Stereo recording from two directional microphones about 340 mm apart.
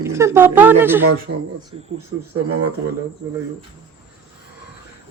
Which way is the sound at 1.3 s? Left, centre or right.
Right.